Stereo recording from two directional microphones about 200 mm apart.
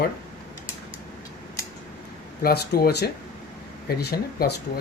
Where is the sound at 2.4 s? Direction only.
50° left (ahead or behind).